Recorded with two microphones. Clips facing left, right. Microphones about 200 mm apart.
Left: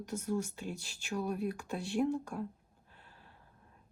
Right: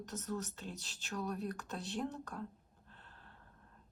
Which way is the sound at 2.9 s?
10° left (ahead or behind).